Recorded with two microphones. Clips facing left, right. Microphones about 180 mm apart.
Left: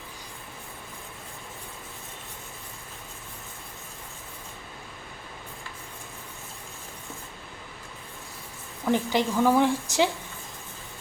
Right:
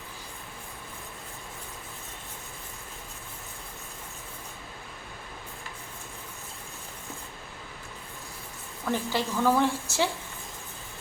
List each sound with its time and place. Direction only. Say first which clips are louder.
8.8 s a woman's voice: left 5 dB; 15° left (ahead or behind)